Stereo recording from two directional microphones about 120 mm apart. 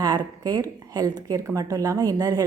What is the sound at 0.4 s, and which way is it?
A woman's voice, 30° right (ahead or behind).